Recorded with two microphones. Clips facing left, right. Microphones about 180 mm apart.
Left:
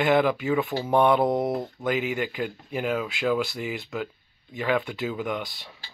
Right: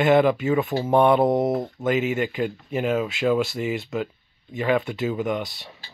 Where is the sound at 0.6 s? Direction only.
20° right (ahead or behind).